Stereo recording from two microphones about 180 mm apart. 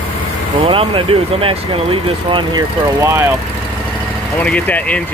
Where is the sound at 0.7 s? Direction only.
30° right (ahead or behind).